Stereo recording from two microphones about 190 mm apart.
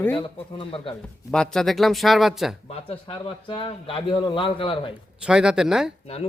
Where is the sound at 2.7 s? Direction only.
30° left (ahead or behind).